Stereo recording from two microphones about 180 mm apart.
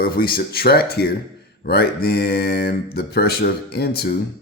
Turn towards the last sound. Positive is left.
turn(degrees=60)  # may be behind; listen again after turning